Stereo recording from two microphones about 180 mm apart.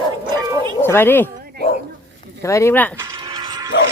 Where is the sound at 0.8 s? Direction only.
10° left (ahead or behind).